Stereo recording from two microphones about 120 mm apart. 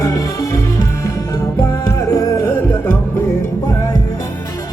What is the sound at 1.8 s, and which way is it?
Music, 25° left (ahead or behind).